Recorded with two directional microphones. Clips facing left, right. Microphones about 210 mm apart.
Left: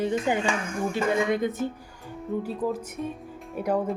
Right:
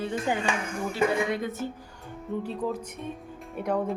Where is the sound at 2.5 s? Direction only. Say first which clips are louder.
Left 2 dB; 5° left (ahead or behind).